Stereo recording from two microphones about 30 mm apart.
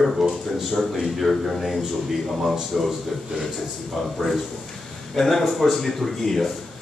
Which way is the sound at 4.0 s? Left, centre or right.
Centre.